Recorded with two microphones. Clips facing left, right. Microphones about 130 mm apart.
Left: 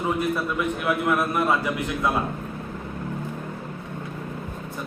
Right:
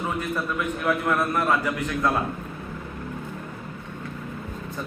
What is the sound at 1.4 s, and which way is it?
Speech, 15° left (ahead or behind).